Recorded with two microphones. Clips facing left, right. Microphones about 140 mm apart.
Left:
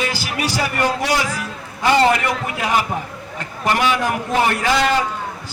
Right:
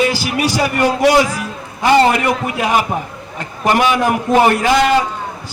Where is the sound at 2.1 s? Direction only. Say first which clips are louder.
Right 3 dB; 20° right (ahead or behind).